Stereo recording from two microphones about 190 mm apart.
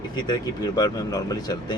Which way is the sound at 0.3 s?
20° left (ahead or behind).